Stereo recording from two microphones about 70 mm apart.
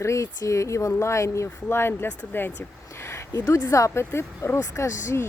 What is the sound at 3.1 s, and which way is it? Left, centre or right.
A woman's voice, left.